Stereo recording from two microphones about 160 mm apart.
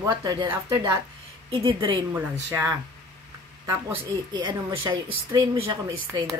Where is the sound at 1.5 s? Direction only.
35° right (ahead or behind).